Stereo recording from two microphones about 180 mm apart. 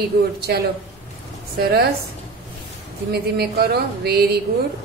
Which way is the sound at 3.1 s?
60° right (ahead or behind).